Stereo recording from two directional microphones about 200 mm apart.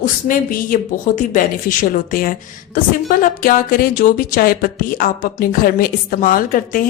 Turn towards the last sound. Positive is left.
turn(degrees=45)  # may be behind; listen again after turning